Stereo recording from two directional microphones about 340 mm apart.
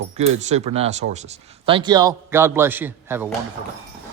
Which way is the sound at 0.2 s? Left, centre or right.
Centre.